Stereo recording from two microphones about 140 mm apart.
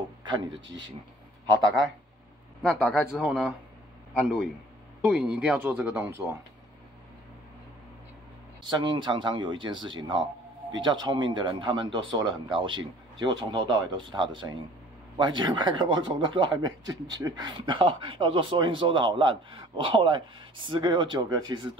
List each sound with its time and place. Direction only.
0.2 s speech: 35° right (ahead or behind)
2.6 s speech: centre (ahead or behind)
5.0 s speech: 5° right (ahead or behind)
8.6 s speech: 35° right (ahead or behind)